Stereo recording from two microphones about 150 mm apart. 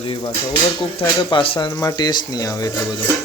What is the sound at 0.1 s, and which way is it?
Speech, 30° left (ahead or behind).